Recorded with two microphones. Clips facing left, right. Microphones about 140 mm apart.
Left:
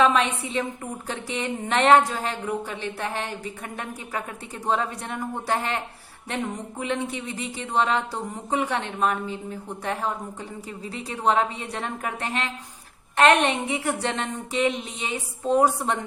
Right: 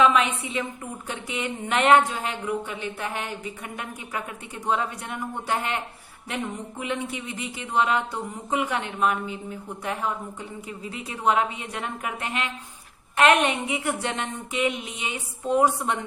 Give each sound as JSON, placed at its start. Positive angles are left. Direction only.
{"t": 0.0, "sound": "speech", "side_deg": 35}